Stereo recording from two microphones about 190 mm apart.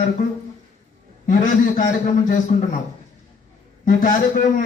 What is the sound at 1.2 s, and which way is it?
A man's voice, 45° left (ahead or behind).